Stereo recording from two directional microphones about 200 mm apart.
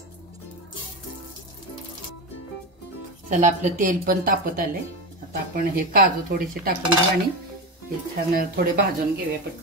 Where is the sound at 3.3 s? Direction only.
40° right (ahead or behind).